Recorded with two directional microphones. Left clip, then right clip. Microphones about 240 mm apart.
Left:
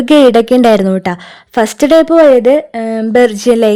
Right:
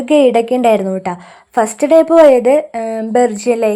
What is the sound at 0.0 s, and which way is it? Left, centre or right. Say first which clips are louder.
A woman's voice: left 4 dB; left.